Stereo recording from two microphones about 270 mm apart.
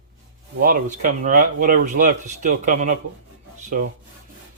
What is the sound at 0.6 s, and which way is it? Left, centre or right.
Speech, right.